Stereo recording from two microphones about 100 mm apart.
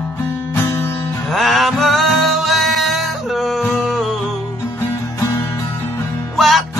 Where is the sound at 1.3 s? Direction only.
Centre (ahead or behind).